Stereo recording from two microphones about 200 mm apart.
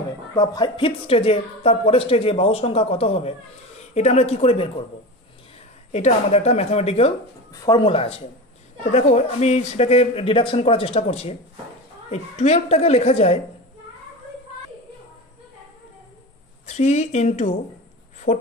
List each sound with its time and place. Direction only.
0.4 s speech: 25° left (ahead or behind)
5.9 s speech: 35° left (ahead or behind)
16.6 s speech: 35° left (ahead or behind)